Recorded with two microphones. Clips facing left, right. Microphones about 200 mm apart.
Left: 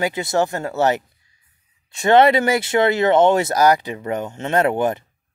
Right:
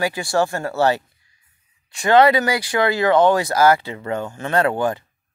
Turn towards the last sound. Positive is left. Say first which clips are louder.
# left 1 dB
turn(degrees=20)  # may be behind; listen again after turning